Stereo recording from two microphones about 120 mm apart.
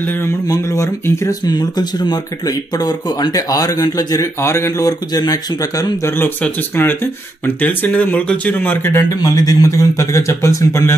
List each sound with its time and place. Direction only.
0.0 s speech: 20° left (ahead or behind)
1.4 s speech: 35° left (ahead or behind)
6.1 s speech: 15° left (ahead or behind)
9.2 s speech: 30° left (ahead or behind)